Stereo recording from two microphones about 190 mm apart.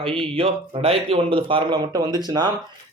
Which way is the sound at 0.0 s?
30° right (ahead or behind).